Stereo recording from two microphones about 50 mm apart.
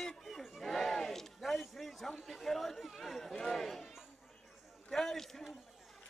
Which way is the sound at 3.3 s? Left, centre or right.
Centre.